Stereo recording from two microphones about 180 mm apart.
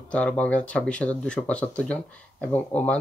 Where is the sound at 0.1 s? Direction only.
5° left (ahead or behind).